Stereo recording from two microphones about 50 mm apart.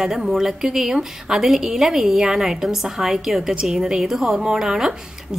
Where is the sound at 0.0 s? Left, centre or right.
Centre.